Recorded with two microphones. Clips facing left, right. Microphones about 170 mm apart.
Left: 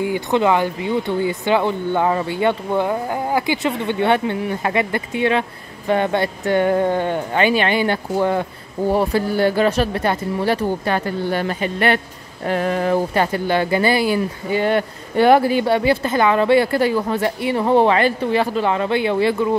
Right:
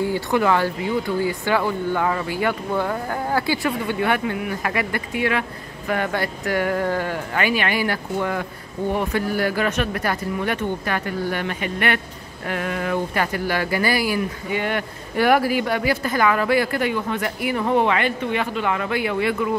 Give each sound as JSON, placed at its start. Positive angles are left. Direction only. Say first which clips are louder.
{"t": 0.0, "sound": "speech", "louder": "left 2 dB", "side_deg": 20}